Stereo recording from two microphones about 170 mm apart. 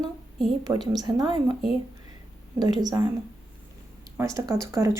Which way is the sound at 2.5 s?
25° right (ahead or behind).